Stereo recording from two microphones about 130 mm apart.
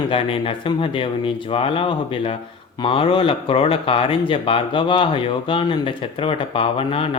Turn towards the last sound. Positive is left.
turn(degrees=45)  # may be behind; listen again after turning